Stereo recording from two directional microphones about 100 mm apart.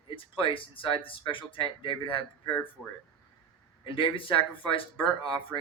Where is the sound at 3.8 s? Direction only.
60° left (ahead or behind).